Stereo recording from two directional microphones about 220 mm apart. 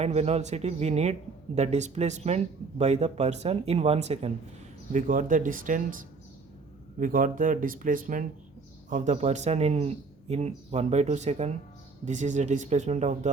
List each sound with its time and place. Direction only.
0.0 s speech: 30° right (ahead or behind)